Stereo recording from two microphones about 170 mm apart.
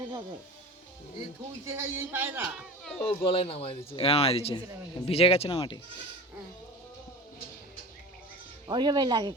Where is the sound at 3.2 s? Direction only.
35° left (ahead or behind).